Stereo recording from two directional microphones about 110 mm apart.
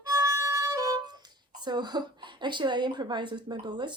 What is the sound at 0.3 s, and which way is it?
Speech, 25° right (ahead or behind).